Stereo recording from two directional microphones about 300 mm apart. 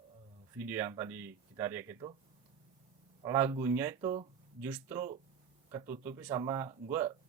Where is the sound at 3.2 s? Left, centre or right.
Centre.